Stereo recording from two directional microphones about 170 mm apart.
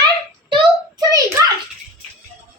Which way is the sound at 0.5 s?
20° right (ahead or behind).